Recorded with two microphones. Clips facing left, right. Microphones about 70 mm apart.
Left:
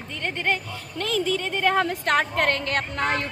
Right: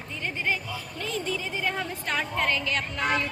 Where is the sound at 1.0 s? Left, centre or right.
Left.